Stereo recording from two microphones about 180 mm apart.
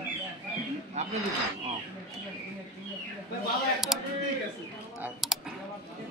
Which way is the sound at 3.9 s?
Centre (ahead or behind).